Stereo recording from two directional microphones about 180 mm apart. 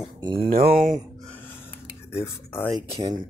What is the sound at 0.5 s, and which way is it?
Speech, 55° right (ahead or behind).